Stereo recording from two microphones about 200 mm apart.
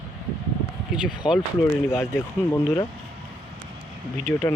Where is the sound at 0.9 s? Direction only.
Centre (ahead or behind).